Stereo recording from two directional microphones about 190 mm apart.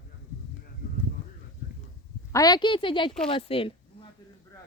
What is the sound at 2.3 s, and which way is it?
A woman's voice, 20° left (ahead or behind).